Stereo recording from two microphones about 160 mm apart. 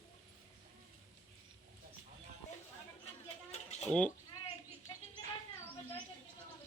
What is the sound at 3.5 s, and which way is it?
Mechanisms, 45° left (ahead or behind).